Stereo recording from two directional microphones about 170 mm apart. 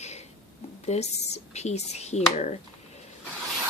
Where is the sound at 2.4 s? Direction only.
40° left (ahead or behind).